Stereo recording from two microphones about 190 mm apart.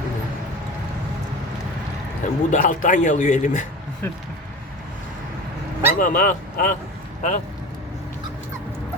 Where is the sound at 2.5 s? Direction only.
45° left (ahead or behind).